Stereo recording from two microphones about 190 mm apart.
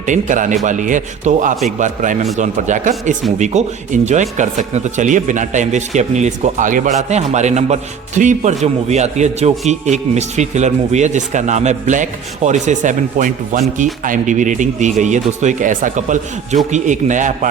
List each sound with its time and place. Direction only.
0.0 s speech: 40° right (ahead or behind)